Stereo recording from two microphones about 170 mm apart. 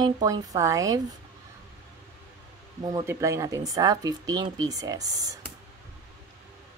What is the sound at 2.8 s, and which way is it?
Speech, 20° right (ahead or behind).